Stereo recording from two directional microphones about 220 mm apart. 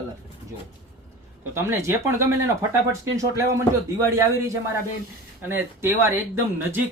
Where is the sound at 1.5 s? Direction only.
10° right (ahead or behind).